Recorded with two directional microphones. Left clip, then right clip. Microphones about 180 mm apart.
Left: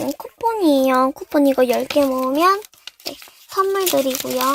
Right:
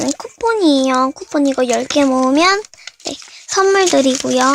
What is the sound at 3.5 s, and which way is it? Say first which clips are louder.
Speech: right 6 dB; 35° right (ahead or behind).